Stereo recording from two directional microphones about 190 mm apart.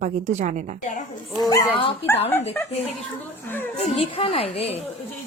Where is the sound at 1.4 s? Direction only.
20° left (ahead or behind).